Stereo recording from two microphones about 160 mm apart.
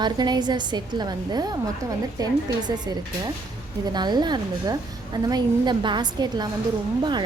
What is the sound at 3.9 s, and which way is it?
A woman's voice, 25° right (ahead or behind).